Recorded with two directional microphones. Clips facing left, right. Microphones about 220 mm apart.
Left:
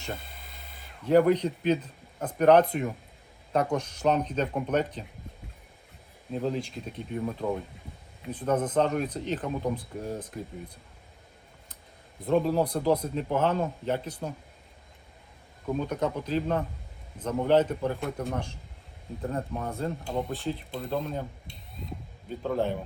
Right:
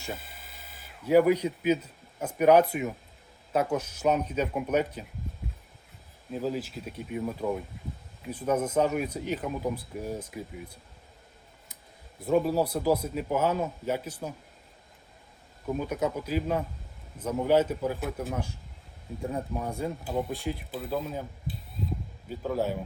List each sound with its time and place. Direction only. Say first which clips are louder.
0.0 s speech: left 1 dB; 5° right (ahead or behind)
6.3 s speech: left 1 dB; 5° right (ahead or behind)
12.2 s speech: even; 5° right (ahead or behind)
15.6 s speech: even; 5° right (ahead or behind)